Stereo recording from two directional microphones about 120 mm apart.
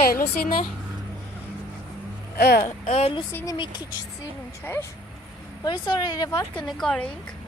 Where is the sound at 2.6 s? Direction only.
70° left (ahead or behind).